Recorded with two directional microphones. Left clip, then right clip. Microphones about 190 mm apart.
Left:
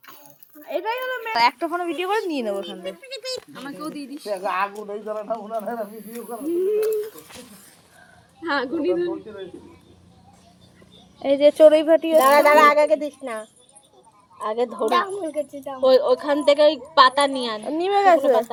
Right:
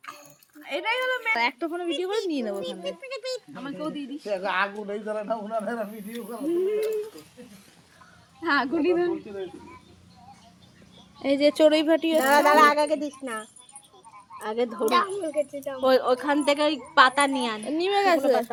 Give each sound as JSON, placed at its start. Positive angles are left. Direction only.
{"t": 0.6, "sound": "speech", "side_deg": -40}
{"t": 0.9, "sound": "speech", "side_deg": -80}
{"t": 1.4, "sound": "speech", "side_deg": -15}
{"t": 3.0, "sound": "speech", "side_deg": -15}
{"t": 8.4, "sound": "speech", "side_deg": -35}
{"t": 11.2, "sound": "a woman's voice", "side_deg": -25}
{"t": 12.2, "sound": "speech", "side_deg": -15}
{"t": 14.3, "sound": "a woman's voice", "side_deg": -25}
{"t": 17.7, "sound": "speech", "side_deg": 0}